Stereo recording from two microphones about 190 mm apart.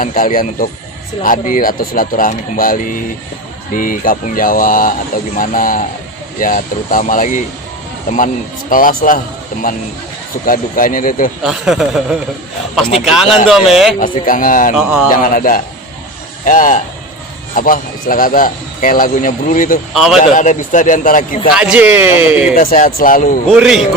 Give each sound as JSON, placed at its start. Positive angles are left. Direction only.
{"t": 0.0, "sound": "a man's voice", "side_deg": 45}
{"t": 11.4, "sound": "speech", "side_deg": 0}
{"t": 13.5, "sound": "speech", "side_deg": 0}
{"t": 14.0, "sound": "a man's voice", "side_deg": 45}
{"t": 19.9, "sound": "speech", "side_deg": 0}
{"t": 20.1, "sound": "a man's voice", "side_deg": 40}
{"t": 21.5, "sound": "a man's voice", "side_deg": -5}
{"t": 22.5, "sound": "a man's voice", "side_deg": 45}
{"t": 23.5, "sound": "speech", "side_deg": 0}